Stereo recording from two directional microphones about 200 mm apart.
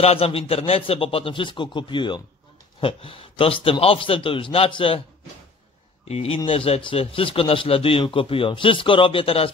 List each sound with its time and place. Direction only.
0.0 s a man's voice: 30° left (ahead or behind)
6.0 s a man's voice: 30° left (ahead or behind)